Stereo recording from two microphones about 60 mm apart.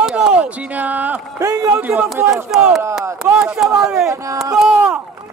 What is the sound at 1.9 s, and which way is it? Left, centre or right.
Speech, centre.